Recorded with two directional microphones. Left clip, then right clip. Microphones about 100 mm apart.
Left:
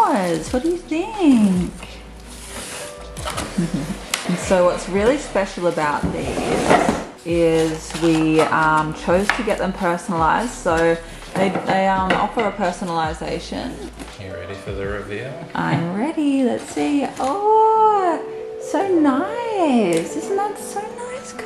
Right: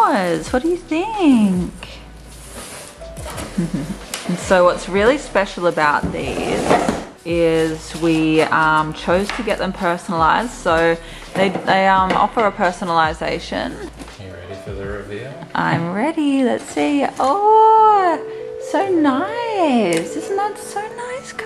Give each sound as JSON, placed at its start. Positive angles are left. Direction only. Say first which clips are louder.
{"t": 0.0, "sound": "speech", "louder": "right 2 dB", "side_deg": -20}
{"t": 4.4, "sound": "a woman's voice", "louder": "right 3 dB", "side_deg": -15}
{"t": 15.5, "sound": "a woman's voice", "louder": "right 4 dB", "side_deg": -20}